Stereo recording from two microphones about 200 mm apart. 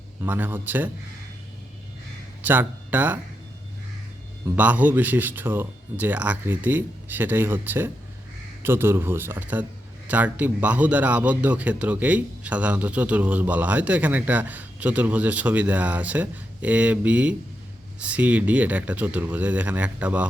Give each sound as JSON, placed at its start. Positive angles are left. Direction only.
{"t": 0.2, "sound": "a man's voice", "side_deg": -10}
{"t": 2.4, "sound": "speech", "side_deg": -10}
{"t": 4.4, "sound": "a man's voice", "side_deg": -10}